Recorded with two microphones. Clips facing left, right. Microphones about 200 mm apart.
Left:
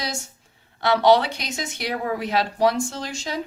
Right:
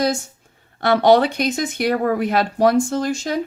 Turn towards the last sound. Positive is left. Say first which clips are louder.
# right 9 dB
turn(degrees=-50)  # may be behind; listen again after turning